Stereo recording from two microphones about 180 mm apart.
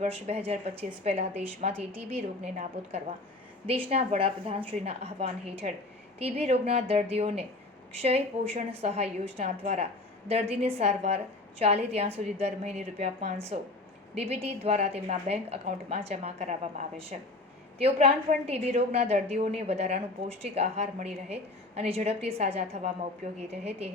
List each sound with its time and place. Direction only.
0.0 s a woman's voice: 35° right (ahead or behind)
1.7 s speech: 10° right (ahead or behind)
2.4 s a woman's voice: 40° right (ahead or behind)